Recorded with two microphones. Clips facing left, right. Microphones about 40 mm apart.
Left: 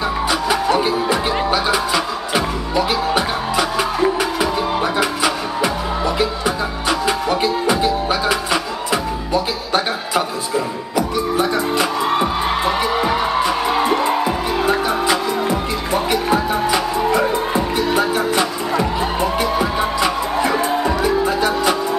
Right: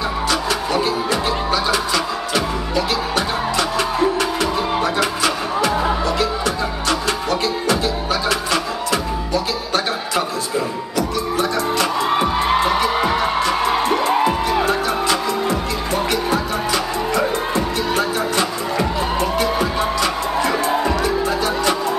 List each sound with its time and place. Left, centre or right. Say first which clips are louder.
0.3 s music: left 4 dB; centre
12.1 s music: right 1 dB; centre